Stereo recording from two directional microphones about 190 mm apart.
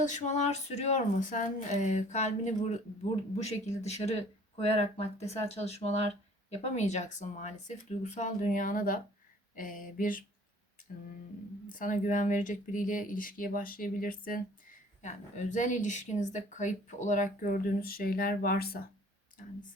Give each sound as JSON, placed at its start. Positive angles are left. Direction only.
{"t": 0.0, "sound": "speech", "side_deg": 40}
{"t": 11.7, "sound": "speech", "side_deg": 45}